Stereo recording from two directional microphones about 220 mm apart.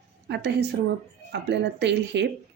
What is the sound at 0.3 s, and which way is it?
A woman's voice, 50° right (ahead or behind).